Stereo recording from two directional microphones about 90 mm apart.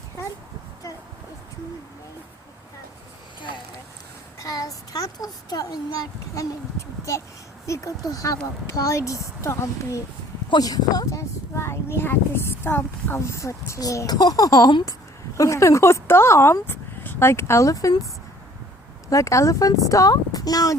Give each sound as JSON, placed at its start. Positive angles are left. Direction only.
{"t": 4.4, "sound": "a sound", "side_deg": 40}
{"t": 6.3, "sound": "speech", "side_deg": 35}
{"t": 10.5, "sound": "speech", "side_deg": 45}
{"t": 19.0, "sound": "speech", "side_deg": 35}